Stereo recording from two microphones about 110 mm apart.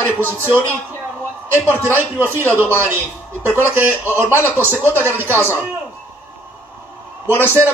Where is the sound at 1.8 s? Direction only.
20° right (ahead or behind).